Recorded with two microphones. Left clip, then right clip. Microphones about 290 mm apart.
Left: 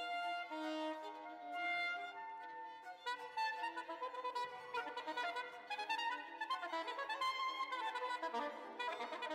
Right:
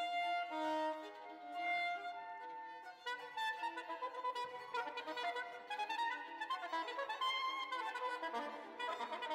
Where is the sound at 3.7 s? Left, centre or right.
Centre.